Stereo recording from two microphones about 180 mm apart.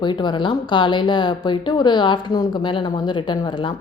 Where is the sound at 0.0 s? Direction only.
25° left (ahead or behind).